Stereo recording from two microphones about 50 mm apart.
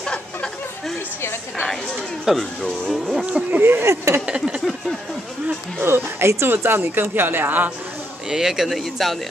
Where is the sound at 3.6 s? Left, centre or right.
Right.